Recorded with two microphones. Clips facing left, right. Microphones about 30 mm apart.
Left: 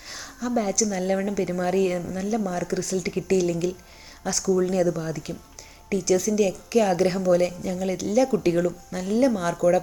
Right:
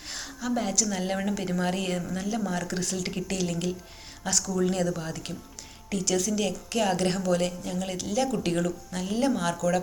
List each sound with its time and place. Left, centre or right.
0.1 s speech: centre
4.2 s speech: centre